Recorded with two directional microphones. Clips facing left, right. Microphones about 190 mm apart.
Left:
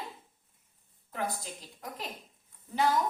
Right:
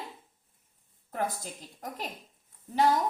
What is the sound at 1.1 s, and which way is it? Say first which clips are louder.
Speech: right 2 dB; 45° right (ahead or behind).